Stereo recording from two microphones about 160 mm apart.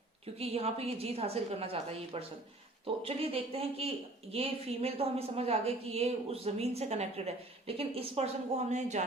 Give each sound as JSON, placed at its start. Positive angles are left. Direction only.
{"t": 0.3, "sound": "speech", "side_deg": -40}